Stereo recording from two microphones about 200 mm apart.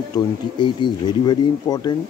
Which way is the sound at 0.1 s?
25° left (ahead or behind).